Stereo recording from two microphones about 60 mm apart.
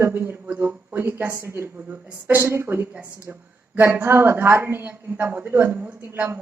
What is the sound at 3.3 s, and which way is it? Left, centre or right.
Speech, right.